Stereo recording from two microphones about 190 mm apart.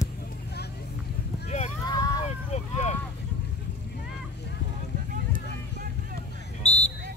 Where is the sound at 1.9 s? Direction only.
20° left (ahead or behind).